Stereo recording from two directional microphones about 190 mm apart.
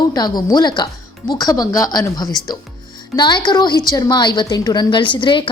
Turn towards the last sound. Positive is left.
turn(degrees=25)  # may be behind; listen again after turning